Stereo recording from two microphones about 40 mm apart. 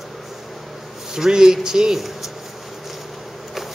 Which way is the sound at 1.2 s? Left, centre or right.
Centre.